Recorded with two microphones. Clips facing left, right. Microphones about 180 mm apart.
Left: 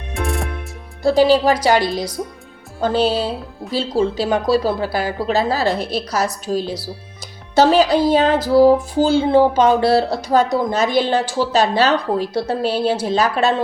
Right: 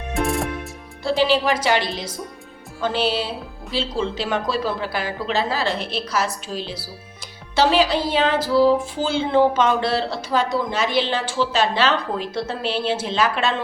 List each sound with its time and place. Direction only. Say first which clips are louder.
0.1 s music: right 1 dB; centre (ahead or behind)
1.0 s speech: left 6 dB; 40° left (ahead or behind)
7.5 s music: left 5 dB; 45° left (ahead or behind)
8.5 s speech: left 6 dB; 40° left (ahead or behind)